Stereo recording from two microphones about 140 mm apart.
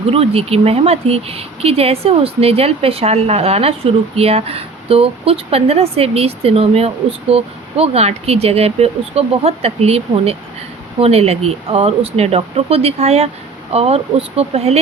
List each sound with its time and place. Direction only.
0.1 s speech: 45° right (ahead or behind)